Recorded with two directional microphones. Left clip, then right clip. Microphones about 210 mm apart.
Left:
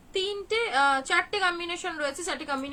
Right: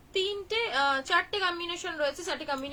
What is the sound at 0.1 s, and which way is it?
A woman's voice, 15° left (ahead or behind).